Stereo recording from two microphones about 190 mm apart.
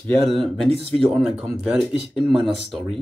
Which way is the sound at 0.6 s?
30° right (ahead or behind).